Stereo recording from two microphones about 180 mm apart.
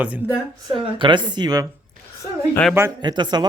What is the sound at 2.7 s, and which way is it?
Speech, 20° right (ahead or behind).